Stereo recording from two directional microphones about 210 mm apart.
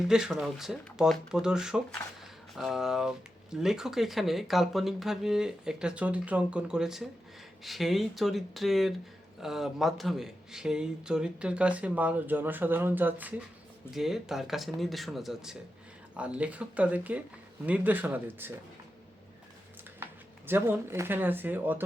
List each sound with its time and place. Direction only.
0.1 s speech: 5° right (ahead or behind)
20.5 s speech: 10° right (ahead or behind)